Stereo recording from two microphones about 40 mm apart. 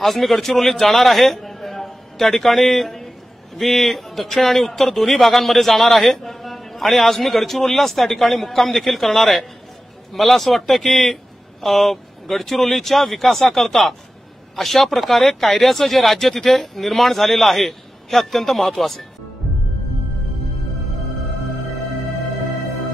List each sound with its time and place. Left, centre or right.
0.0 s a man's voice: centre